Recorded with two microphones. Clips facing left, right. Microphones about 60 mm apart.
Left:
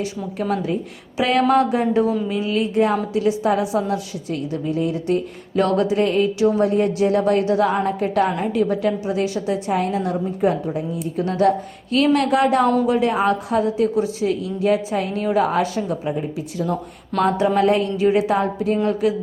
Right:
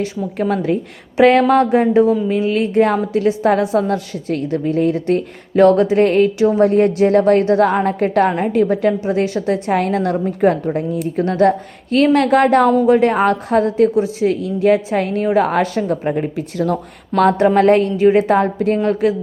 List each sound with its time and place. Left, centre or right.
0.3 s a woman's voice: right
2.3 s a woman's voice: right
6.4 s a woman's voice: right
6.7 s a woman's voice: right
11.3 s a woman's voice: right
13.1 s a woman's voice: right
13.9 s a woman's voice: right
17.3 s a woman's voice: right